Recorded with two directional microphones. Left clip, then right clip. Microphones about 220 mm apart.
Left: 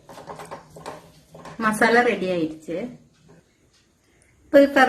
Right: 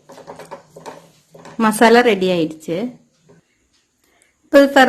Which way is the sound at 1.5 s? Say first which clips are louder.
Right 6 dB; 55° right (ahead or behind).